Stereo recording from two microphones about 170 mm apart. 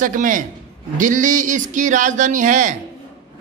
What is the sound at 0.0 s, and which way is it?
Speech, 50° right (ahead or behind).